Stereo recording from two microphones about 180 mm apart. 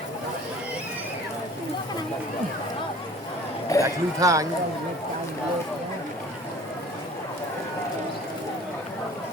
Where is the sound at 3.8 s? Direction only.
15° right (ahead or behind).